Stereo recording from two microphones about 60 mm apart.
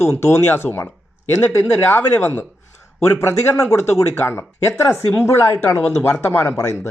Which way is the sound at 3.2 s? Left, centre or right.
Left.